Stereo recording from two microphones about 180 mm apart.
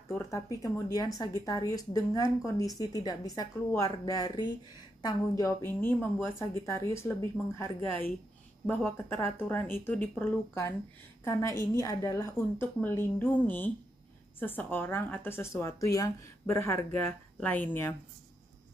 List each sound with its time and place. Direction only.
0.1 s speech: 15° left (ahead or behind)
14.4 s speech: 10° left (ahead or behind)